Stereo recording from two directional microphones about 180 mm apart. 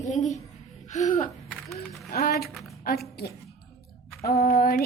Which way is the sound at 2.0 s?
55° left (ahead or behind).